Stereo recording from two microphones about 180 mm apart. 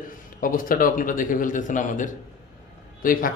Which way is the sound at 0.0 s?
50° left (ahead or behind).